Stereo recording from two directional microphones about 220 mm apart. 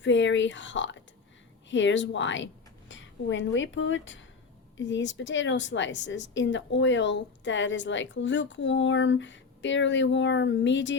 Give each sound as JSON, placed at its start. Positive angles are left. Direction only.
{"t": 0.0, "sound": "a woman's voice", "side_deg": 55}